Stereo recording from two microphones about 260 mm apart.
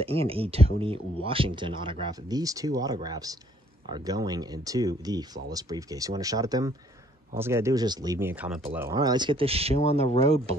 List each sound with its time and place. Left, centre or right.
0.0 s speech: right